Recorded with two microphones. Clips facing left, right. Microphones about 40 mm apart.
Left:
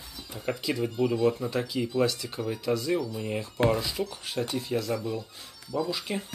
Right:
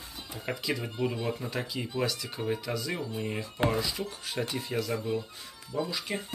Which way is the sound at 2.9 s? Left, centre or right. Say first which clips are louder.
Left 5 dB; right.